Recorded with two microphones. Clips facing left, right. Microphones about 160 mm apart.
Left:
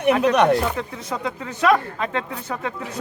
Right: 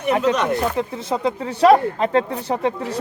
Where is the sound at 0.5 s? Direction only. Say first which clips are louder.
Right 1 dB; 30° right (ahead or behind).